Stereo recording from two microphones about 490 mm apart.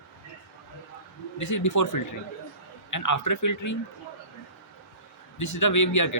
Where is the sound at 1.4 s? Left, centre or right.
Left.